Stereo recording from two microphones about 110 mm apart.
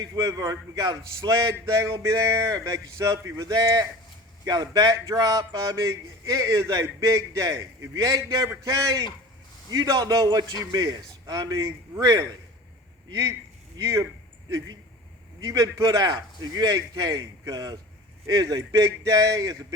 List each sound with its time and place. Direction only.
0.0 s a man's voice: 30° right (ahead or behind)
13.7 s a man's voice: 30° right (ahead or behind)
15.4 s speech: 30° right (ahead or behind)